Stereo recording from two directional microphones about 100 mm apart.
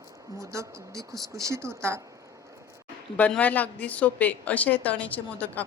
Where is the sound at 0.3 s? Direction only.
30° right (ahead or behind).